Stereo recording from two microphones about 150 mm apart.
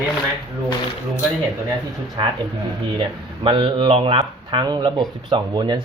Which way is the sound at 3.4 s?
35° right (ahead or behind).